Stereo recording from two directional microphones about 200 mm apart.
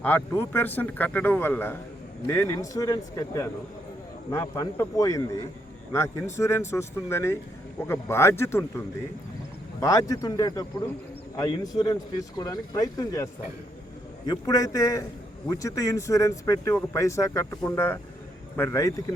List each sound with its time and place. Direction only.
0.0 s speech: 10° left (ahead or behind)
9.8 s a man's voice: 15° left (ahead or behind)